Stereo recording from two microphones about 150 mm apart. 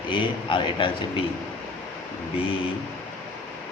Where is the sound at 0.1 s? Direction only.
35° left (ahead or behind).